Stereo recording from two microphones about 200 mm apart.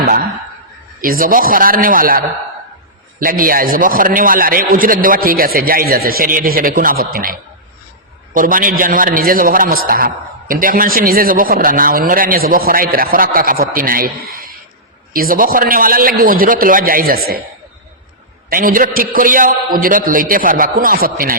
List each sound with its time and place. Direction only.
0.0 s chuckle: 45° right (ahead or behind)
1.0 s a man's voice: 45° right (ahead or behind)
15.1 s a man's voice: 45° right (ahead or behind)
18.5 s a man's voice: 45° right (ahead or behind)